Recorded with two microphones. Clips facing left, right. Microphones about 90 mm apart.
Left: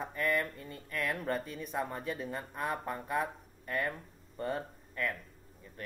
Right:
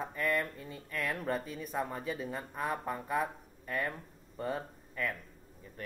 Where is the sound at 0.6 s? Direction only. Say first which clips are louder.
Right 1 dB; 55° left (ahead or behind).